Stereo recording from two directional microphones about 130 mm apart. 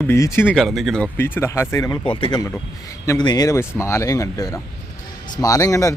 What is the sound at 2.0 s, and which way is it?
Speech, 40° left (ahead or behind).